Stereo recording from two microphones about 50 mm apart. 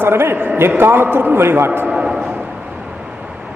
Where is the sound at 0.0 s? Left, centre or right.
Right.